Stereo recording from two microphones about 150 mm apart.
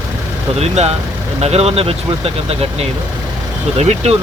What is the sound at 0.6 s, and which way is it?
Speech, 45° right (ahead or behind).